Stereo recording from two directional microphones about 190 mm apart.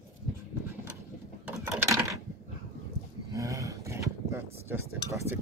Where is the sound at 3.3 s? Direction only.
15° right (ahead or behind).